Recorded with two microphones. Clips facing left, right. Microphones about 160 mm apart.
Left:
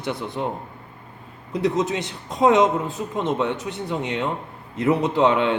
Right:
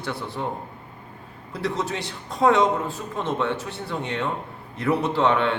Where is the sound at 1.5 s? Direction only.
20° left (ahead or behind).